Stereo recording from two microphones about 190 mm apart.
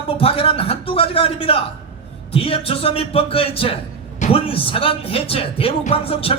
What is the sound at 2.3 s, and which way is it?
A man's voice, 30° left (ahead or behind).